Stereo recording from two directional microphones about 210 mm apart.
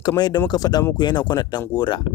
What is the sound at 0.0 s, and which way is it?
Speech, 20° left (ahead or behind).